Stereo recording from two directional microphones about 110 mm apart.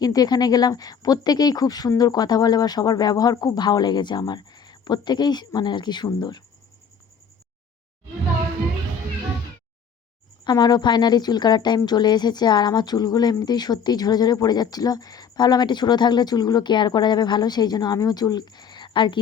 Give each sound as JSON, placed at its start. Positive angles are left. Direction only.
{"t": 0.0, "sound": "speech", "side_deg": 35}
{"t": 10.4, "sound": "speech", "side_deg": 35}